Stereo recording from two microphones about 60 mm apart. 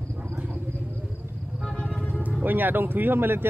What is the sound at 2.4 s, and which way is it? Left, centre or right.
Speech, right.